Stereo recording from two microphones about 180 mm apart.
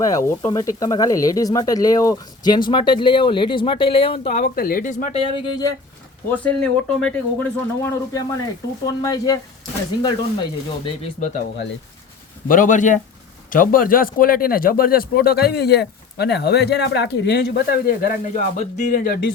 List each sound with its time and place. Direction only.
0.1 s speech: 15° left (ahead or behind); by 4.4 s 30° left (ahead or behind)
4.4 s speech: 50° left (ahead or behind)
5.1 s speech: 30° left (ahead or behind)
6.3 s speech: 5° left (ahead or behind)
10.8 s speech: 35° left (ahead or behind)
12.5 s a man's voice: 45° left (ahead or behind)